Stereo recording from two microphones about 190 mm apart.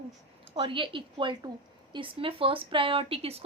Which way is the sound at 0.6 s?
25° right (ahead or behind).